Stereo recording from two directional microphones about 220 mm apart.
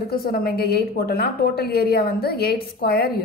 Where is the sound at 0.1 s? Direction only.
45° left (ahead or behind).